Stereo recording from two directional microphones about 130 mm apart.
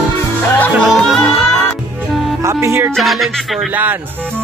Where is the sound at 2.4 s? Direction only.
20° right (ahead or behind).